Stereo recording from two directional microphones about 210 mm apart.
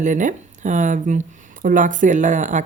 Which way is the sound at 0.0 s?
35° right (ahead or behind).